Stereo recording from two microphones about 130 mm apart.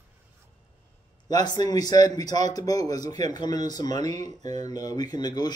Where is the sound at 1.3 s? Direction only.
30° left (ahead or behind).